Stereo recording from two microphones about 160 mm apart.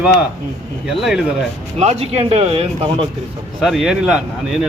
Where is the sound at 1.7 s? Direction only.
40° right (ahead or behind).